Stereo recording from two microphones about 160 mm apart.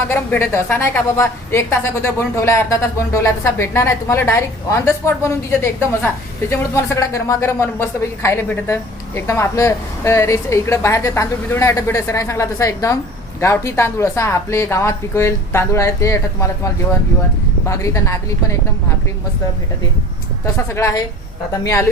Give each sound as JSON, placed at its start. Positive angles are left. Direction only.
{"t": 0.1, "sound": "a woman's voice", "side_deg": 15}
{"t": 20.4, "sound": "a woman's voice", "side_deg": 15}